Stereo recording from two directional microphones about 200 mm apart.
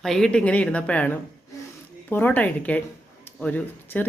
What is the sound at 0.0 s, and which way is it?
A woman's voice, centre (ahead or behind).